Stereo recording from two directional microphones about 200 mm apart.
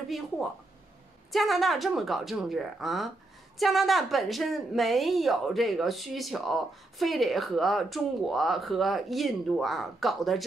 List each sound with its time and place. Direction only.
1.3 s speech: centre (ahead or behind)